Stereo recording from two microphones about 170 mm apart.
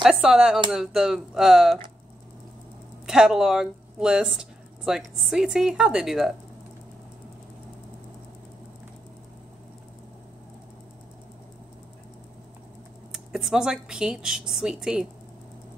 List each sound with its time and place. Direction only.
0.0 s speech: centre (ahead or behind)
3.1 s speech: 5° right (ahead or behind)
13.1 s speech: centre (ahead or behind)